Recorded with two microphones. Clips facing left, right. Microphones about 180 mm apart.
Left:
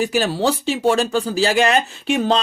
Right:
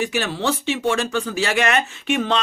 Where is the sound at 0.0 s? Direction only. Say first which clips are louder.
Left 4 dB; 35° left (ahead or behind).